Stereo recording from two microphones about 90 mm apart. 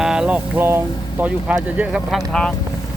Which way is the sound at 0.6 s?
25° right (ahead or behind).